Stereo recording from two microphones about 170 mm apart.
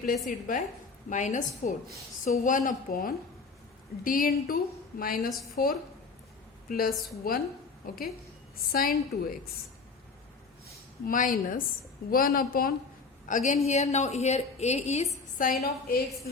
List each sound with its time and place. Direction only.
0.3 s a woman's voice: 50° left (ahead or behind)
11.0 s a woman's voice: 55° left (ahead or behind)
15.6 s a woman's voice: 65° left (ahead or behind)